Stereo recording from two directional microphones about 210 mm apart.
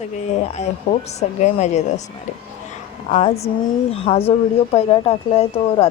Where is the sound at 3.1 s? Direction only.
30° left (ahead or behind).